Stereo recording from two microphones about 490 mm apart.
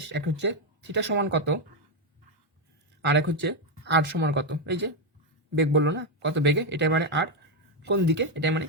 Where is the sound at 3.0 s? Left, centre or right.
Right.